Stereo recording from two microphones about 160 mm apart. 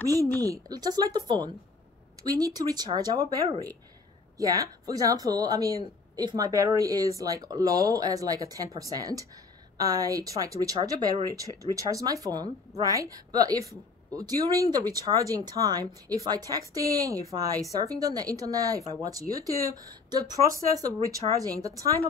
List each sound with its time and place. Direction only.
0.0 s a woman's voice: 20° right (ahead or behind)